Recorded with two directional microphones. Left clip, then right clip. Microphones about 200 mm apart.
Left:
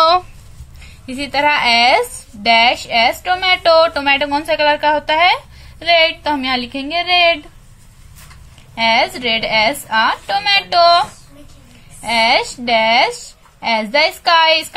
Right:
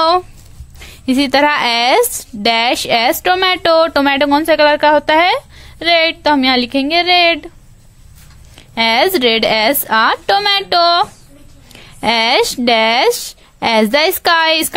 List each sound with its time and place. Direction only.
0.7 s speech: 55° right (ahead or behind)
8.7 s speech: 60° right (ahead or behind)